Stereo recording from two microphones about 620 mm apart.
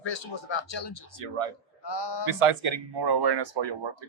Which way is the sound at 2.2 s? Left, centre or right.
Right.